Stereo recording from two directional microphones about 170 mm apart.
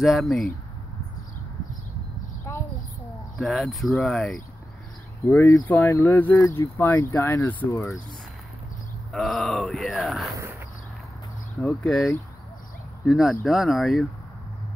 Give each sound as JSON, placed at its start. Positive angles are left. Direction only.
{"t": 0.0, "sound": "groan", "side_deg": 0}
{"t": 3.3, "sound": "groan", "side_deg": 0}
{"t": 5.2, "sound": "speech", "side_deg": 15}
{"t": 9.1, "sound": "groan", "side_deg": 0}
{"t": 11.6, "sound": "groan", "side_deg": 5}